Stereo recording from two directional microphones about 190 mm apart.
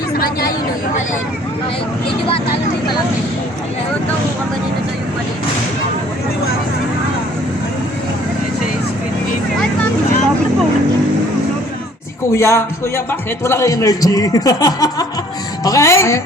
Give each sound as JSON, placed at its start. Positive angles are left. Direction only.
{"t": 12.3, "sound": "a woman's voice", "side_deg": 15}